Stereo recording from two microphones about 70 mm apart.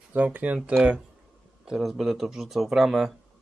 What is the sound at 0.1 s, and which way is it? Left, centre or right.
Speech, right.